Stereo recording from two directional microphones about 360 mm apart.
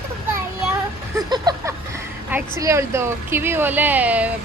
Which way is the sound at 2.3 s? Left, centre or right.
Centre.